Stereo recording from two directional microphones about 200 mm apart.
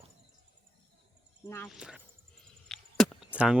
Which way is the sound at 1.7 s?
5° right (ahead or behind).